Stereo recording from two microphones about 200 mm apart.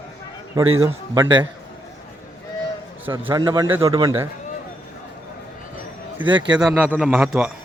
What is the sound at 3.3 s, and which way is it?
Speech, 20° right (ahead or behind).